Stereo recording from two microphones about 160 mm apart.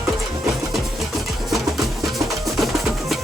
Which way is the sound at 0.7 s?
Centre (ahead or behind).